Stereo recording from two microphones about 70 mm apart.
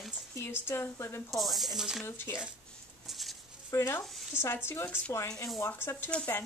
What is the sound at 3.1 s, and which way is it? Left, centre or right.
Chicken, centre.